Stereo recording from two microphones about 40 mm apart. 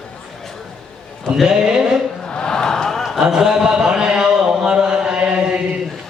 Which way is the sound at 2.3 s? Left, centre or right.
Left.